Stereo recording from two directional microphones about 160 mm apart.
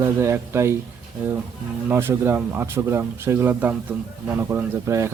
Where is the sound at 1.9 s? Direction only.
15° right (ahead or behind).